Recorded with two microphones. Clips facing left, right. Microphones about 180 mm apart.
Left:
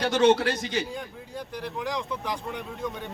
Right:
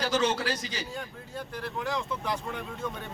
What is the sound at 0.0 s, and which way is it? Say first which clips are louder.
Speech: left 7 dB; 60° left (ahead or behind).